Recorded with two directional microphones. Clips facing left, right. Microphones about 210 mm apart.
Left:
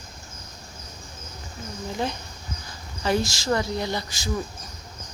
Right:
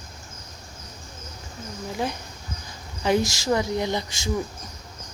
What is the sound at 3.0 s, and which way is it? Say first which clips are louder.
Speech: right 2 dB; 15° right (ahead or behind).